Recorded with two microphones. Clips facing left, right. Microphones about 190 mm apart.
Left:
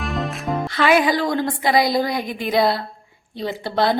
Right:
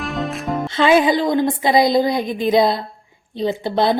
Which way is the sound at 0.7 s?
25° right (ahead or behind).